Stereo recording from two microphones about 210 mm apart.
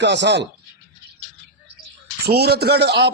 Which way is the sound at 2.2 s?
50° right (ahead or behind).